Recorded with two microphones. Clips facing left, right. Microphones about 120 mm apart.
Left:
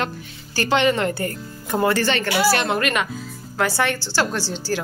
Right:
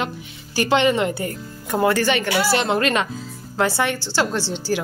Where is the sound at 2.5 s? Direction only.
25° right (ahead or behind).